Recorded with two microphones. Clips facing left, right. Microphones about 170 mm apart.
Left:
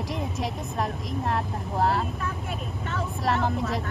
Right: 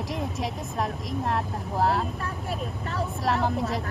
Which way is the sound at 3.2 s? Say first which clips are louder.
Even; centre (ahead or behind).